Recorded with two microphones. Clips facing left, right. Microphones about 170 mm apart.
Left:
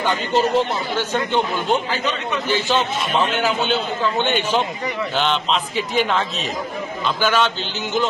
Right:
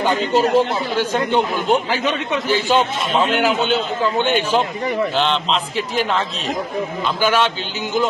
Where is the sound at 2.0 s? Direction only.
60° right (ahead or behind).